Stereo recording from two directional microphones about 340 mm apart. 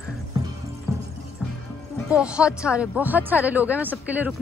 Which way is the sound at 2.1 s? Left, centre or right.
Centre.